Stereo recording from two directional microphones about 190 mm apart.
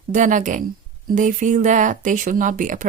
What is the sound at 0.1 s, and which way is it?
Speech, 40° right (ahead or behind).